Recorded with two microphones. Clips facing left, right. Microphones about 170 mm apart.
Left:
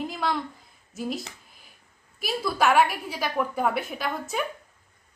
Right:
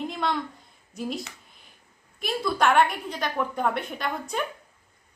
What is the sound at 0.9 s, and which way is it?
A woman's voice, centre (ahead or behind).